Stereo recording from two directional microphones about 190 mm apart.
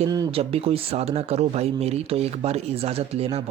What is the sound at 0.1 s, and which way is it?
Speech, 25° right (ahead or behind).